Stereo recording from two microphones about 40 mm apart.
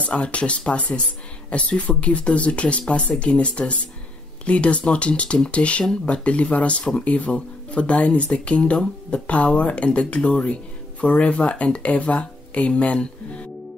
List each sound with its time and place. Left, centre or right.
0.0 s speech: left